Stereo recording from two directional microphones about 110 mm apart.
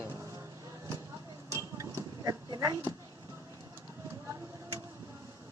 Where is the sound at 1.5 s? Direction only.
30° right (ahead or behind).